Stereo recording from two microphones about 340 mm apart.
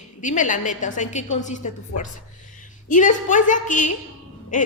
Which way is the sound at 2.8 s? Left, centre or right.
Left.